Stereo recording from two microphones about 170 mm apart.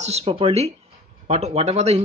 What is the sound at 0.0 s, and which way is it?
Speech, 40° right (ahead or behind).